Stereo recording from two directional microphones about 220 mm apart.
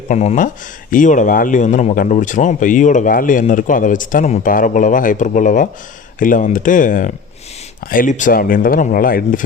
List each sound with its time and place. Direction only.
0.1 s speech: 30° left (ahead or behind)